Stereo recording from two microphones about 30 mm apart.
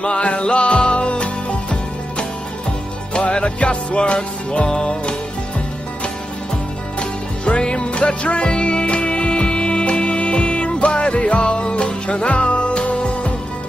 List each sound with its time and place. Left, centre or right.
0.0 s music: left
7.0 s music: left
11.4 s music: left